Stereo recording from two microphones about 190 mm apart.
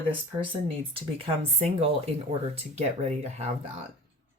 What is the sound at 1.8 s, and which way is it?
Speech, 30° right (ahead or behind).